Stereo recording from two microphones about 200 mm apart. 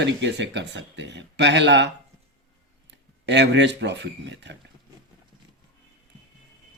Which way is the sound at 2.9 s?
60° right (ahead or behind).